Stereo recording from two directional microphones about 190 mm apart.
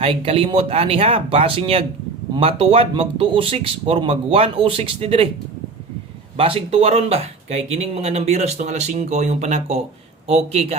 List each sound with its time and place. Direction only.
0.0 s speech: 30° right (ahead or behind)
6.3 s speech: 30° right (ahead or behind)